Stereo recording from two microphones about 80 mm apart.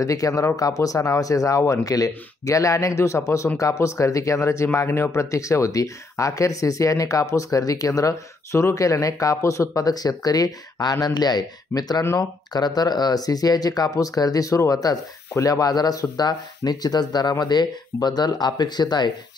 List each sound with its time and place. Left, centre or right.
0.0 s speech: left